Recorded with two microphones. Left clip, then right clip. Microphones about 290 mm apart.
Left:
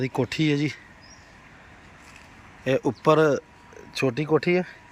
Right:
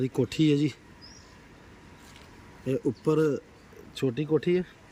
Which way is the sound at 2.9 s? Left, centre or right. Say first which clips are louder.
Left 6 dB; centre.